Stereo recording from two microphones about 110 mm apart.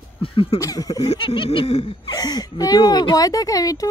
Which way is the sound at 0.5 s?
30° left (ahead or behind).